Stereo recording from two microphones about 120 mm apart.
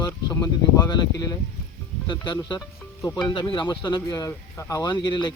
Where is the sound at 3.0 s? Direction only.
30° left (ahead or behind).